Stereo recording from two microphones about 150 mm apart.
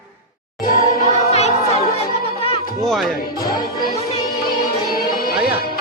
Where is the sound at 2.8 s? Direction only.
Centre (ahead or behind).